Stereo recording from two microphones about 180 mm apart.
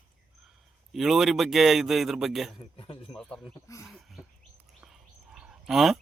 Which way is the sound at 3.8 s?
Centre (ahead or behind).